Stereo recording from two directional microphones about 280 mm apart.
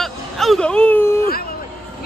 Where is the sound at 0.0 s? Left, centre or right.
Centre.